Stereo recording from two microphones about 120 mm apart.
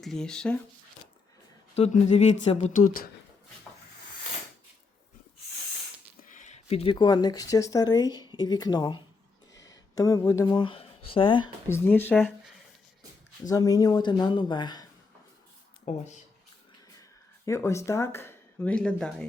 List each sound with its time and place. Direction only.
0.0 s speech: 5° left (ahead or behind)
1.7 s speech: 65° left (ahead or behind)
6.2 s a sound: 90° left; by 6.9 s 60° left (ahead or behind)
6.9 s speech: 35° left (ahead or behind)
11.7 s speech: 15° left (ahead or behind)
13.5 s speech: 30° left (ahead or behind)
15.9 s speech: 55° left (ahead or behind)
17.4 s speech: 25° left (ahead or behind)
18.7 s speech: 10° left (ahead or behind)